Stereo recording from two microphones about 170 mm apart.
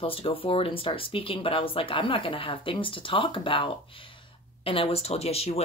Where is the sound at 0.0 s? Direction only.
35° left (ahead or behind).